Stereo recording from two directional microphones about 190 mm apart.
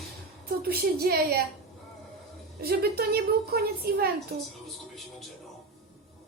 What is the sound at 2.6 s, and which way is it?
A woman's voice, 55° right (ahead or behind).